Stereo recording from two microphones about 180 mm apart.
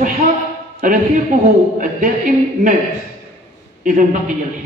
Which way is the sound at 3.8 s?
45° right (ahead or behind).